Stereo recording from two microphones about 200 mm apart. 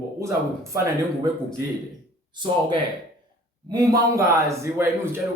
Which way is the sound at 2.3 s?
25° right (ahead or behind).